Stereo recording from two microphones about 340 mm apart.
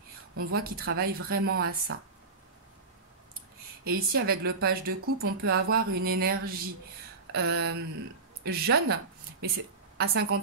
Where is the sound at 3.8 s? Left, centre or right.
Right.